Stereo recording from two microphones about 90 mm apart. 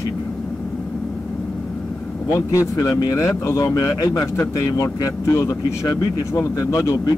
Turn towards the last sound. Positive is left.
turn(degrees=40)  # may be behind; listen again after turning